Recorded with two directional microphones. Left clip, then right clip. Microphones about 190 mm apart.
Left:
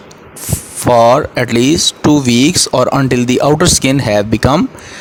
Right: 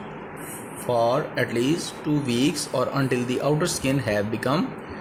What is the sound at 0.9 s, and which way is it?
Speech, 50° left (ahead or behind).